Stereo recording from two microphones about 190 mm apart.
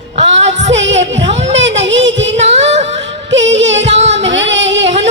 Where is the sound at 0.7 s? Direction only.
70° right (ahead or behind).